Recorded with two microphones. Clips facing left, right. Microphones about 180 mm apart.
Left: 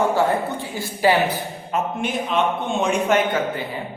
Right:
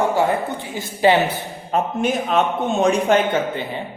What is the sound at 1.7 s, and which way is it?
A man's voice, 40° right (ahead or behind).